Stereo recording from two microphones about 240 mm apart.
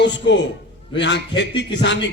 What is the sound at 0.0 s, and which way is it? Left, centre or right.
Speech, left.